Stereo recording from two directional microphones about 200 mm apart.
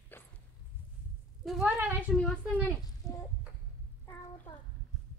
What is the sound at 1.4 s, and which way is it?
Speech, centre (ahead or behind).